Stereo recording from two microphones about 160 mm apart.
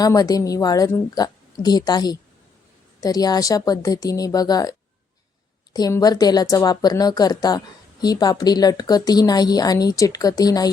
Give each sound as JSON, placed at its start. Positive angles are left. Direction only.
{"t": 0.0, "sound": "a woman's voice", "side_deg": 20}
{"t": 5.7, "sound": "a woman's voice", "side_deg": 25}